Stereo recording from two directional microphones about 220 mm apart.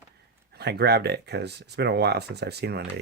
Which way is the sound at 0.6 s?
50° right (ahead or behind).